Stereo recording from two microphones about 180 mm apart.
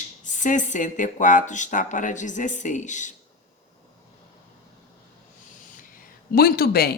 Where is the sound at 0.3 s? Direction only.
45° left (ahead or behind).